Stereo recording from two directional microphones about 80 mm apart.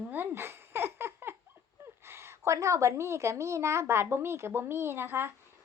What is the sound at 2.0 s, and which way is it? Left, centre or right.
A woman's voice, right.